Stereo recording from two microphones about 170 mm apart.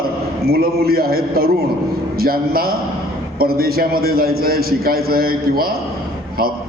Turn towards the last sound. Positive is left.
turn(degrees=-60)  # may be behind; listen again after turning